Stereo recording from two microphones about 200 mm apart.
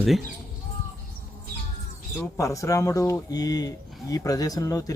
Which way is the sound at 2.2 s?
15° left (ahead or behind).